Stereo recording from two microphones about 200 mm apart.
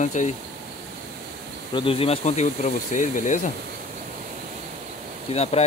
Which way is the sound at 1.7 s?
25° left (ahead or behind).